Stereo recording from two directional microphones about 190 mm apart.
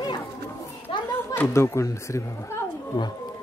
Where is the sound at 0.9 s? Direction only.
30° left (ahead or behind).